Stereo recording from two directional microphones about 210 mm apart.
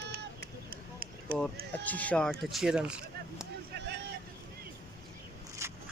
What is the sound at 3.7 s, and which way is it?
Vehicle, 55° right (ahead or behind).